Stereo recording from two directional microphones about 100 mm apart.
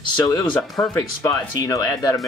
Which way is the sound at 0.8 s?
30° left (ahead or behind).